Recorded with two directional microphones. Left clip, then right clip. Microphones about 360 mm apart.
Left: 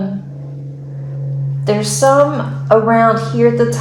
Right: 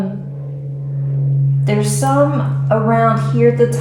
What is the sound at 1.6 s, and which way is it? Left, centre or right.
A woman's voice, left.